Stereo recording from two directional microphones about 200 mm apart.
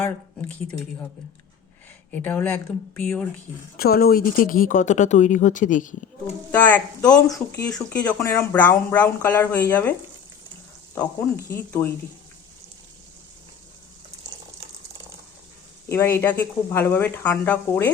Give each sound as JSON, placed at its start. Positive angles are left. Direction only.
{"t": 2.0, "sound": "speech", "side_deg": 10}
{"t": 3.8, "sound": "speech", "side_deg": 50}
{"t": 6.2, "sound": "speech", "side_deg": 10}
{"t": 10.9, "sound": "speech", "side_deg": 10}
{"t": 15.9, "sound": "speech", "side_deg": 15}